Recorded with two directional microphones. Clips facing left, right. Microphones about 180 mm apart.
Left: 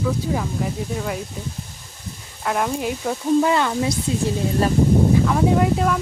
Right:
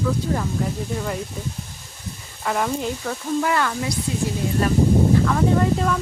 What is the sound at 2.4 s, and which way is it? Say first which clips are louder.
Speech: left 1 dB; centre (ahead or behind).